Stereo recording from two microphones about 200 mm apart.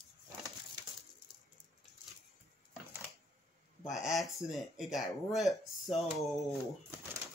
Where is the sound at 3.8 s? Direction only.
Centre (ahead or behind).